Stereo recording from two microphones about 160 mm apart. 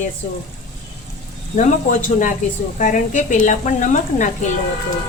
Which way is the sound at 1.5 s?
50° left (ahead or behind).